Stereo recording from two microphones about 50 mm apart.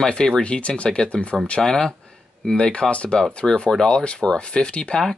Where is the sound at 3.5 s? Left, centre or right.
Centre.